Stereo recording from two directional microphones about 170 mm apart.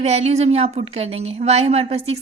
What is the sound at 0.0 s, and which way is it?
Speech, 40° right (ahead or behind).